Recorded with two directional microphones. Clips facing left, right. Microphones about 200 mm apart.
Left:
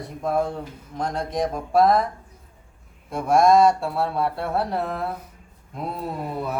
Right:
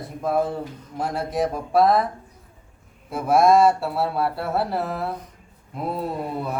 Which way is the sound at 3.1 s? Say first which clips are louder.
Even; 5° right (ahead or behind).